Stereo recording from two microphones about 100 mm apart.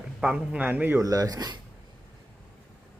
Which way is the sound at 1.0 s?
35° right (ahead or behind).